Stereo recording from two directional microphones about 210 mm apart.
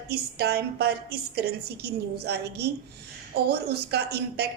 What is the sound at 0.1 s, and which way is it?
A woman's voice, 50° right (ahead or behind).